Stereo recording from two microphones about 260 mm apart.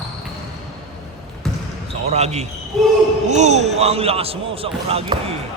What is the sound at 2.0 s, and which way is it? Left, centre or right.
Speech, right.